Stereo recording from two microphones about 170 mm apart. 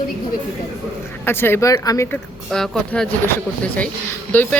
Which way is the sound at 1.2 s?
15° left (ahead or behind).